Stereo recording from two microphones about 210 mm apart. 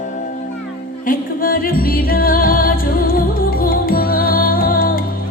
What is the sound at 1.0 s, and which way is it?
Music, 40° left (ahead or behind).